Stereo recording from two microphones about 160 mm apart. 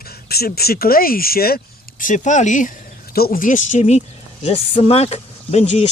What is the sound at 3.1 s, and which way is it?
Speech, 70° left (ahead or behind).